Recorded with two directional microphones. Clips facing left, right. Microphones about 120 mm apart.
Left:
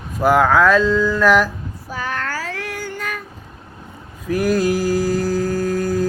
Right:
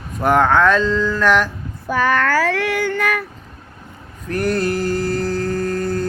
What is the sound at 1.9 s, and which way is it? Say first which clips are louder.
Child singing: right 9 dB; 70° right (ahead or behind).